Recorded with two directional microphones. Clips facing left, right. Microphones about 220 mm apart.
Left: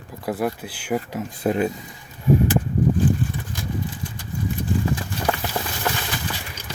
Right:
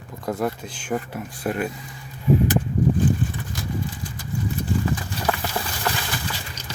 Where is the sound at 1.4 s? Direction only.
25° left (ahead or behind).